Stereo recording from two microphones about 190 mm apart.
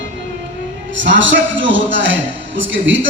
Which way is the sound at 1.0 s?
75° right (ahead or behind).